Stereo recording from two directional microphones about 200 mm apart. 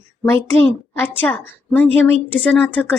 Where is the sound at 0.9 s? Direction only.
10° left (ahead or behind).